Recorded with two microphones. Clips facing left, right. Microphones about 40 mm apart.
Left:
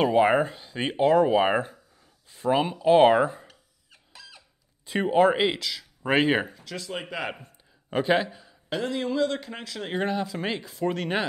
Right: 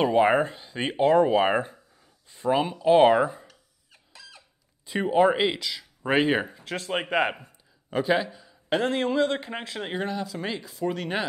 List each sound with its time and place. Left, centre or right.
0.0 s speech: centre
4.8 s speech: centre
6.6 s speech: right
7.9 s a man's voice: centre
8.6 s speech: right
9.9 s speech: centre
10.7 s speech: centre